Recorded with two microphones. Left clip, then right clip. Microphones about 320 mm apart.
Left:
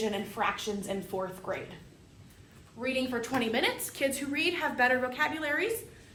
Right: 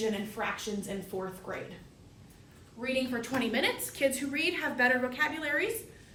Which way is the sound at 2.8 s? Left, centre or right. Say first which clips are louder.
Left 1 dB; centre.